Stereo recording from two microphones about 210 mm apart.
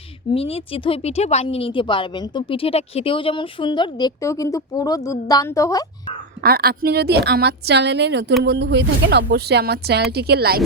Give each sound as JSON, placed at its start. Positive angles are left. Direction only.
{"t": 0.3, "sound": "a woman's voice", "side_deg": 25}
{"t": 6.4, "sound": "speech", "side_deg": -45}